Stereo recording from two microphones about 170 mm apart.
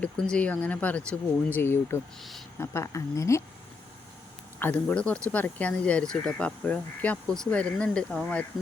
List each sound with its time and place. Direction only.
0.0 s speech: 5° left (ahead or behind)
4.6 s speech: 10° left (ahead or behind)